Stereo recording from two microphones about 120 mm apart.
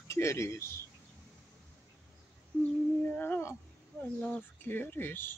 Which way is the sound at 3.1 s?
15° left (ahead or behind).